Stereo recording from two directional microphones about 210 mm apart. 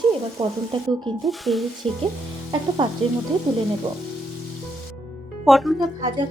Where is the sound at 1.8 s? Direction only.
25° right (ahead or behind).